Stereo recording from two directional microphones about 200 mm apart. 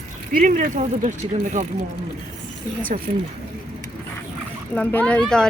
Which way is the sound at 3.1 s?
40° right (ahead or behind).